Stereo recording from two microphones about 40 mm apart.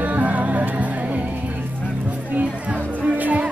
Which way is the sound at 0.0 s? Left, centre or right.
Right.